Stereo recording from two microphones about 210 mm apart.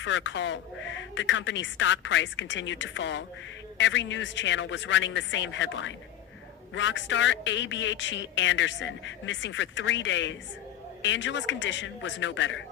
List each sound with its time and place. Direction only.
0.0 s a man's voice: 60° left (ahead or behind)